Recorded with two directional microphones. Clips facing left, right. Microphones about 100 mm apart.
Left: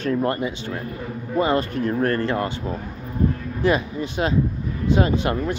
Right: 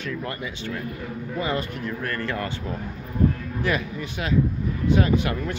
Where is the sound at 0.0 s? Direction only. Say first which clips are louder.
Left 9 dB; 40° left (ahead or behind).